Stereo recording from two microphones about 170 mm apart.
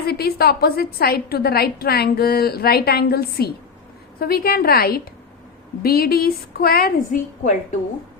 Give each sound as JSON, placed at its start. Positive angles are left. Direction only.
{"t": 0.1, "sound": "a woman's voice", "side_deg": 65}